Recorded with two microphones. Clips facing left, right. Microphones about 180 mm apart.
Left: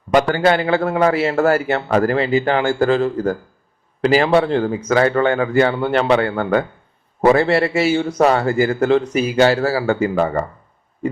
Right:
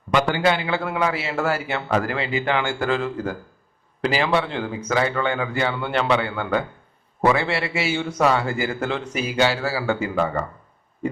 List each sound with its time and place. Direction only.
0.1 s a man's voice: 45° left (ahead or behind)